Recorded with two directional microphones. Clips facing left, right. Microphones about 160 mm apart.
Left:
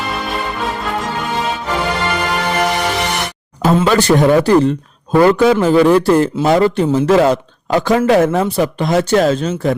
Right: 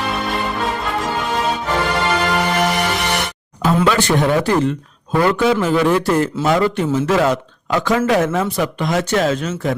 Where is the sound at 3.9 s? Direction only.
40° left (ahead or behind).